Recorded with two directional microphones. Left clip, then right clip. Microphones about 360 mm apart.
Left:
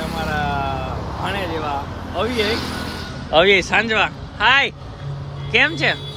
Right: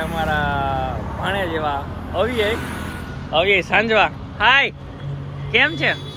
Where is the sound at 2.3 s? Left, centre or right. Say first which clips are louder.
Even; left.